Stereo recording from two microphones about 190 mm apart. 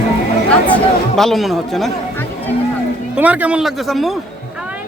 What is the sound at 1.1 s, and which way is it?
Speech, centre (ahead or behind).